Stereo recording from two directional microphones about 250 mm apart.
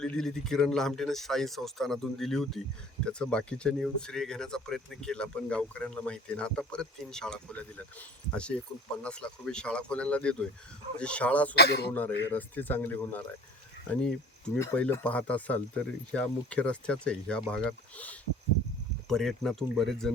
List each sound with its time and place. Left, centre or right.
0.0 s speech: centre
11.5 s a man's voice: left
11.9 s speech: centre
14.6 s speech: centre